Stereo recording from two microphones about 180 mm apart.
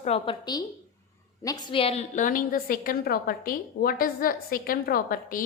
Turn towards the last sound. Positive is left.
turn(degrees=50)  # may be behind; listen again after turning